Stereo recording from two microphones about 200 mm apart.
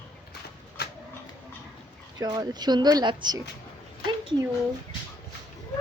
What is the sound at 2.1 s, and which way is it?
Speech, 20° right (ahead or behind).